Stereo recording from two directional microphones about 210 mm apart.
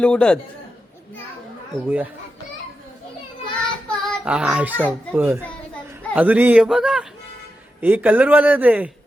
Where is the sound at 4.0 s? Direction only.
Centre (ahead or behind).